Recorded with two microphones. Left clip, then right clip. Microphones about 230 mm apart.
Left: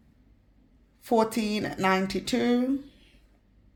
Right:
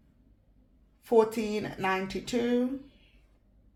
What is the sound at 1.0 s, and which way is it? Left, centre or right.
Speech, left.